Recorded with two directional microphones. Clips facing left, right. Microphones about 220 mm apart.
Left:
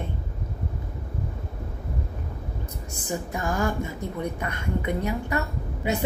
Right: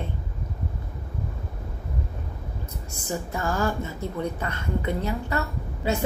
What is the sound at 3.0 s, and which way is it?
A woman's voice, 15° left (ahead or behind).